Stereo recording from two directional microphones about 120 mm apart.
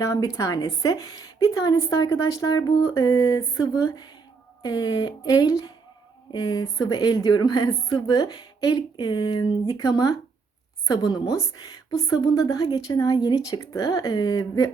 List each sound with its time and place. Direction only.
0.0 s a woman's voice: 25° left (ahead or behind)